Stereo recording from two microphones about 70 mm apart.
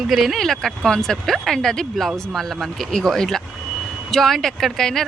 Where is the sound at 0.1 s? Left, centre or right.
Centre.